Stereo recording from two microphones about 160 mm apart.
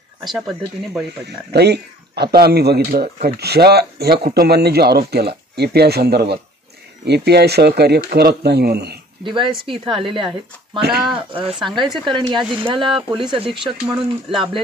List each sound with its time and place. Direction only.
0.3 s speech: 5° right (ahead or behind)
1.2 s speech: 90° right; by 3.1 s 75° right (ahead or behind)
3.3 s speech: 90° right
8.1 s speech: 70° right (ahead or behind); by 8.9 s 90° right
9.2 s speech: 30° right (ahead or behind)
10.8 s speech: 80° right
11.1 s speech: 35° right (ahead or behind)